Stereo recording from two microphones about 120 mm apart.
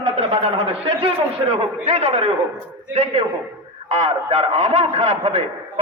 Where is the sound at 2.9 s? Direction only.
65° right (ahead or behind).